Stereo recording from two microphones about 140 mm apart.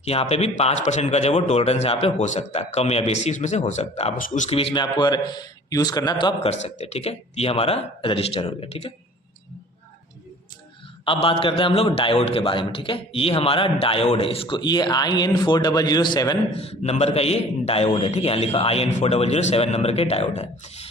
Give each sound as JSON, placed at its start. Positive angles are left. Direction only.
{"t": 0.0, "sound": "a man's voice", "side_deg": 45}
{"t": 6.5, "sound": "a man's voice", "side_deg": 55}
{"t": 11.0, "sound": "a man's voice", "side_deg": 40}
{"t": 16.6, "sound": "a man's voice", "side_deg": 50}